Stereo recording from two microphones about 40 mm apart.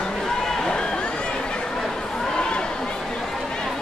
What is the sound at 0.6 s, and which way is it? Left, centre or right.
Run, centre.